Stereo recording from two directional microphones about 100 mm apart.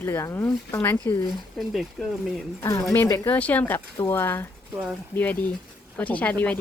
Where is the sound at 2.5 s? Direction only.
25° left (ahead or behind).